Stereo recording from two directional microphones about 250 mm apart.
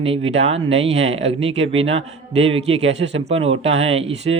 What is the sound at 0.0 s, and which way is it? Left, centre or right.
Speech, right.